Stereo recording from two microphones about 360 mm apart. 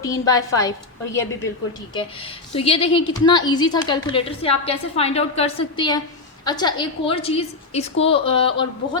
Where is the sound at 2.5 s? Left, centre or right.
Centre.